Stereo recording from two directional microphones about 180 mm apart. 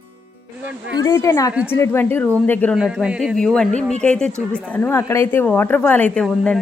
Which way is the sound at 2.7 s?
5° right (ahead or behind).